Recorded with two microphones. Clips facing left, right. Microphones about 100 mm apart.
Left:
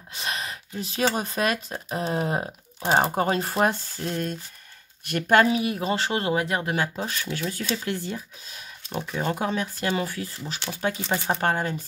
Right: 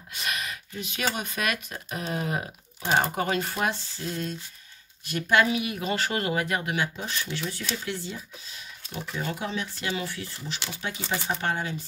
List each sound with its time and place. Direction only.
0.1 s speech: 30° left (ahead or behind); by 8.2 s 50° left (ahead or behind)
9.2 s speech: 45° left (ahead or behind)